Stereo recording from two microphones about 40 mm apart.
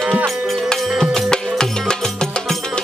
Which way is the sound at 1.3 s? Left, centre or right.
Centre.